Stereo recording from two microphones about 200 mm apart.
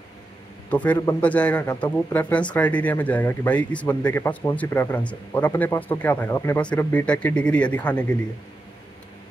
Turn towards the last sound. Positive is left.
turn(degrees=5)  # may be behind; listen again after turning